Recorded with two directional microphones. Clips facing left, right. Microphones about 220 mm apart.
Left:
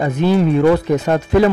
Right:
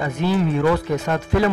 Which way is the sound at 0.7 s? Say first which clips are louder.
Left 6 dB; 30° left (ahead or behind).